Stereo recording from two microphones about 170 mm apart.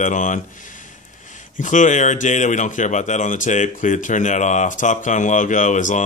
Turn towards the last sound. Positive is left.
turn(degrees=45)  # may be behind; listen again after turning